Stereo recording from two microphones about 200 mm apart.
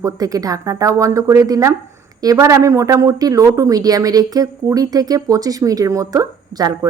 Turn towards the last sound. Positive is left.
turn(degrees=-15)  # may be behind; listen again after turning